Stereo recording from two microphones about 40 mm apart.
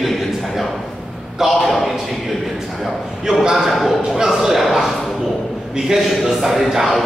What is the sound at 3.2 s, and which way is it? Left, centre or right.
Speech, centre.